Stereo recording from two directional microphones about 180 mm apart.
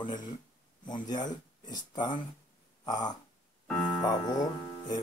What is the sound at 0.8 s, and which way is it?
Speech, 25° left (ahead or behind).